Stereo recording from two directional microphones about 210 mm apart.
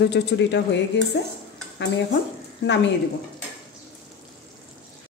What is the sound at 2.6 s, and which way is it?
Speech, 55° left (ahead or behind).